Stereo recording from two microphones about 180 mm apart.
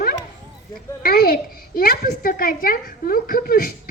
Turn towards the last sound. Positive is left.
turn(degrees=55)  # may be behind; listen again after turning